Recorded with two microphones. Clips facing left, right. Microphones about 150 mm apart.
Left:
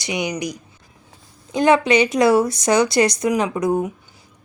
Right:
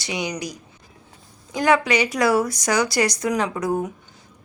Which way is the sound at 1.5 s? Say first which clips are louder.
Left 4 dB; 25° left (ahead or behind).